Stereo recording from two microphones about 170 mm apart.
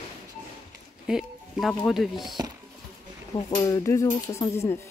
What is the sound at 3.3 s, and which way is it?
Speech, 20° left (ahead or behind).